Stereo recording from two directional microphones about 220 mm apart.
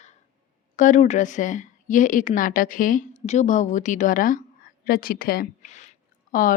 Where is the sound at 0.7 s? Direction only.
35° left (ahead or behind).